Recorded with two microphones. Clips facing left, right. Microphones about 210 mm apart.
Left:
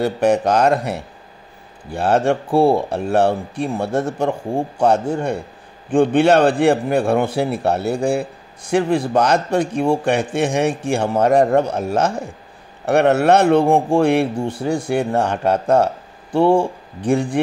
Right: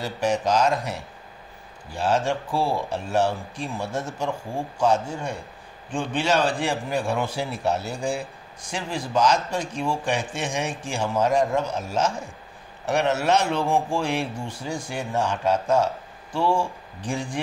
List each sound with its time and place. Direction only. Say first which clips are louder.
0.0 s a man's voice: left 8 dB; 60° left (ahead or behind)